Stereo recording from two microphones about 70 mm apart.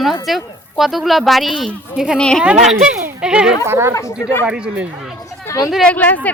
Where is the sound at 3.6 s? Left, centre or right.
Right.